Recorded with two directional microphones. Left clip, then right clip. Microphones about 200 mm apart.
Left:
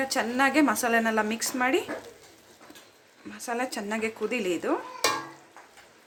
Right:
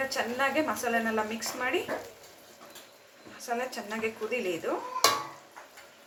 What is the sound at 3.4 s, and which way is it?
A woman's voice, 70° left (ahead or behind).